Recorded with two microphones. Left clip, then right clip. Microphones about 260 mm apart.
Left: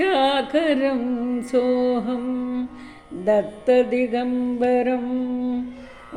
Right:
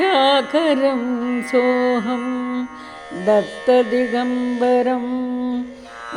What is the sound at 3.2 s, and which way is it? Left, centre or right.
Music, right.